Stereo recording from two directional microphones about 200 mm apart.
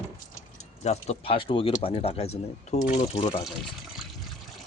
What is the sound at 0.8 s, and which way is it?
Speech, 35° left (ahead or behind).